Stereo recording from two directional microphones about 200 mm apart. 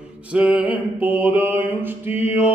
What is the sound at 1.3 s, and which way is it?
Mantra, 10° right (ahead or behind).